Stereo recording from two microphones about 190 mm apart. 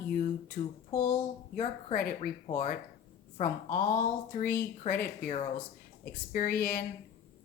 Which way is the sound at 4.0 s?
45° left (ahead or behind).